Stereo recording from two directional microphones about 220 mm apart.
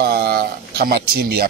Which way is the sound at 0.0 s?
45° right (ahead or behind).